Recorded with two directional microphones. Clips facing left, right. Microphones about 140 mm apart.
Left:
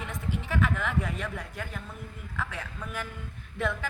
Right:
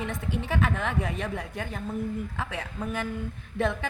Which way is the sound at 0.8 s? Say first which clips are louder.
Right 2 dB; 25° right (ahead or behind).